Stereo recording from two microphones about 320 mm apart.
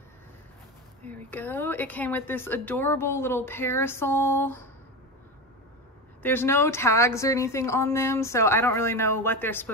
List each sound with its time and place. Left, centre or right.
1.0 s speech: centre
6.2 s speech: centre